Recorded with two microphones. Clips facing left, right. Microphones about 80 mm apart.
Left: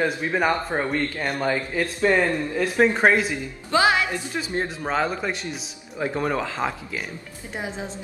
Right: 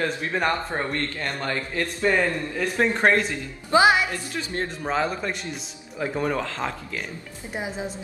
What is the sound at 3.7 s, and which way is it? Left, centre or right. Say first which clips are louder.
Speech: right 2 dB; right.